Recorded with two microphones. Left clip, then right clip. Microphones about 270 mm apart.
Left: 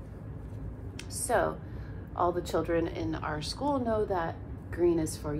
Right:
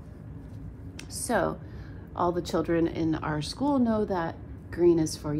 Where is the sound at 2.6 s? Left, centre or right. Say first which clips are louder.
Right 3 dB; right.